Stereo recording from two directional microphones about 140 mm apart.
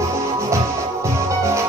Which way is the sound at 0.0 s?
20° right (ahead or behind).